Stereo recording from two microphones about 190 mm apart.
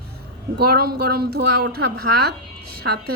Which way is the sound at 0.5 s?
55° right (ahead or behind).